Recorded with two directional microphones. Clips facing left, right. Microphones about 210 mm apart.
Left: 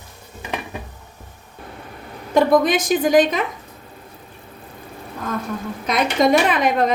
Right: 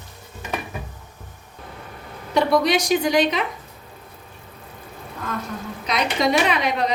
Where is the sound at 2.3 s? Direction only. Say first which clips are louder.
Left 3 dB; 50° left (ahead or behind).